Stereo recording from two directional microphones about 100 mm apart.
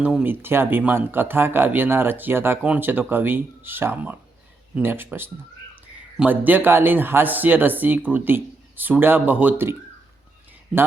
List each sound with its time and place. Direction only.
0.0 s speech: 15° right (ahead or behind)
6.1 s speech: 15° right (ahead or behind)